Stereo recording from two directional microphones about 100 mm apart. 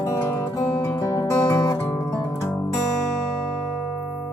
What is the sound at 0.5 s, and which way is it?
Music, 50° left (ahead or behind).